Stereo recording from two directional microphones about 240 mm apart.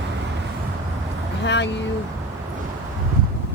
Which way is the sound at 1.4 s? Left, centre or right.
Left.